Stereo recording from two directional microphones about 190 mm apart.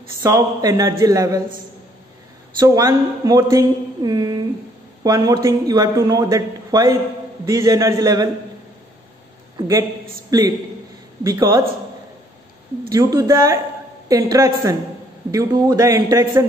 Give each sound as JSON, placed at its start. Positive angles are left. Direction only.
{"t": 0.2, "sound": "speech", "side_deg": -20}
{"t": 2.6, "sound": "a man's voice", "side_deg": -20}
{"t": 10.3, "sound": "speech", "side_deg": -20}
{"t": 12.9, "sound": "a man's voice", "side_deg": -20}